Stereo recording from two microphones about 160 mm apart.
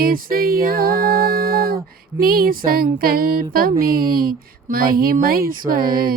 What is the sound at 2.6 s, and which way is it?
Music, 65° right (ahead or behind).